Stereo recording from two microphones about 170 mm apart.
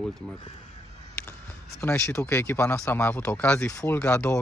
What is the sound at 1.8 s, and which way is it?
Speech, 15° left (ahead or behind).